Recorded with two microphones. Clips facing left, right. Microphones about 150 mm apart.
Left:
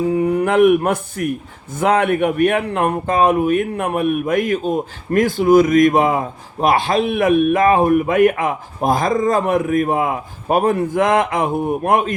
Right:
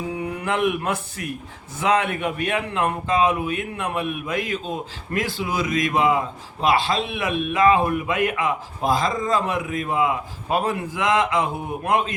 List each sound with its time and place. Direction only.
0.1 s a man's voice: 45° left (ahead or behind)